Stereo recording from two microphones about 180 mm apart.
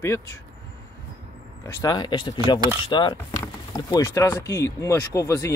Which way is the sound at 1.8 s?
20° left (ahead or behind).